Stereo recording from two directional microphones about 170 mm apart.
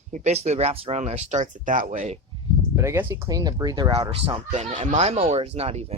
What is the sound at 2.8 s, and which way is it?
Speech, 15° right (ahead or behind).